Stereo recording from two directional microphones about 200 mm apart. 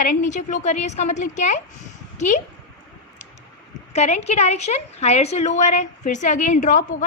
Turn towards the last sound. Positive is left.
turn(degrees=40)  # may be behind; listen again after turning